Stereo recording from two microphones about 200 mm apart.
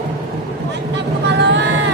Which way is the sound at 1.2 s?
60° right (ahead or behind).